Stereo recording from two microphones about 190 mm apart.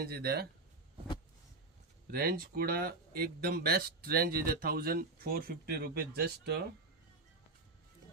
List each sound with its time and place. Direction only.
0.0 s speech: 55° right (ahead or behind)
2.0 s speech: 50° right (ahead or behind)